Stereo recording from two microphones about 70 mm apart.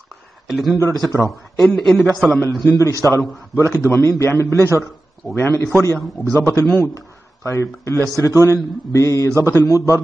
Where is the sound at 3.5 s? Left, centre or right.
Left.